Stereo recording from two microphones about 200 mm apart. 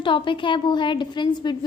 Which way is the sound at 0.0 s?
25° left (ahead or behind).